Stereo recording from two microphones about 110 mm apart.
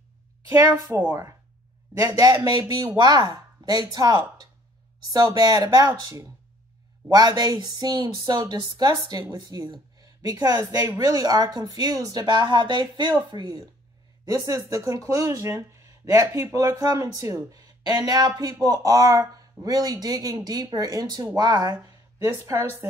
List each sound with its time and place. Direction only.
0.5 s speech: 35° right (ahead or behind)
22.5 s speech: 25° right (ahead or behind)